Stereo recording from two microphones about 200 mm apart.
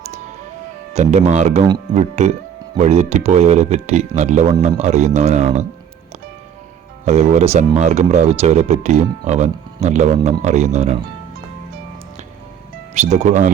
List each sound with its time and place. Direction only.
0.9 s speech: 35° right (ahead or behind)
7.0 s speech: 35° right (ahead or behind)
12.9 s speech: 35° right (ahead or behind)